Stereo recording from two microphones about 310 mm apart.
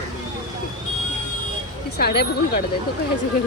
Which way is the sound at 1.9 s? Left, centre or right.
Left.